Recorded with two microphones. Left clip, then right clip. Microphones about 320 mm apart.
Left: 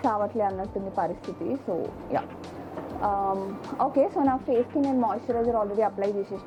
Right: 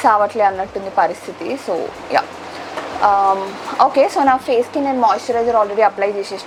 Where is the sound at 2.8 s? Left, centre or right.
Centre.